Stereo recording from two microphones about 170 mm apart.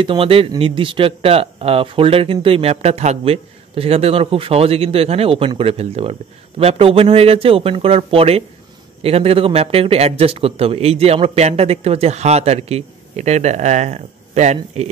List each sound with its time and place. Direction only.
0.0 s speech: 30° right (ahead or behind)